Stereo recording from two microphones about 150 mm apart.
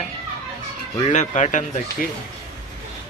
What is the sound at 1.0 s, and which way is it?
Speech, 50° left (ahead or behind).